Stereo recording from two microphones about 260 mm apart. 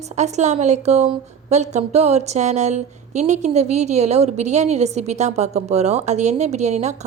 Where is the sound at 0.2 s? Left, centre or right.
Right.